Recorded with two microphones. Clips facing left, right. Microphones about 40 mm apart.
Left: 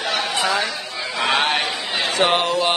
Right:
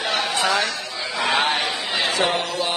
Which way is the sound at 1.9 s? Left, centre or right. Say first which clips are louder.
Even; left.